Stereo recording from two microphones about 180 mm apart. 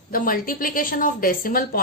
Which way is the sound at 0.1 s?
50° left (ahead or behind).